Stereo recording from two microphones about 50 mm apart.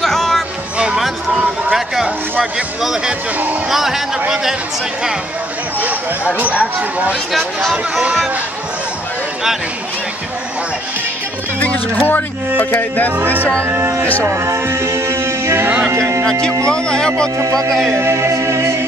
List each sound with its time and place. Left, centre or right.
0.0 s music: centre
0.9 s a sound: centre
3.7 s speech: centre
7.7 s speech: centre
11.6 s speech: left
13.7 s speech: right
14.4 s music: right
15.9 s speech: right
16.3 s speech: centre
17.6 s music: centre
18.1 s music: right